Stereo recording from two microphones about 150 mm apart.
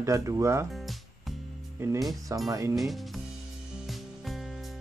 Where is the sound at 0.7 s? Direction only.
Centre (ahead or behind).